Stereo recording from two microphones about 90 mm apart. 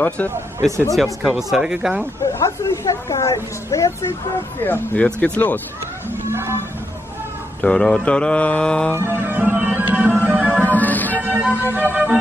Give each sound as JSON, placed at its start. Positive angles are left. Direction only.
{"t": 0.3, "sound": "speech", "side_deg": -30}
{"t": 0.9, "sound": "speech", "side_deg": 0}
{"t": 2.3, "sound": "a woman's voice", "side_deg": 35}
{"t": 4.6, "sound": "speech", "side_deg": 20}
{"t": 7.6, "sound": "mantra", "side_deg": 10}
{"t": 8.9, "sound": "music", "side_deg": -25}
{"t": 10.7, "sound": "music", "side_deg": 20}
{"t": 11.2, "sound": "music", "side_deg": -15}
{"t": 11.7, "sound": "speech", "side_deg": -20}